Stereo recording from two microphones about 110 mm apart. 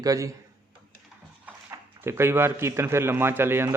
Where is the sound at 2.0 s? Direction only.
20° right (ahead or behind).